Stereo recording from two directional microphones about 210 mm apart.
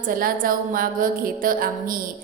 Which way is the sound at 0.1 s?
40° right (ahead or behind).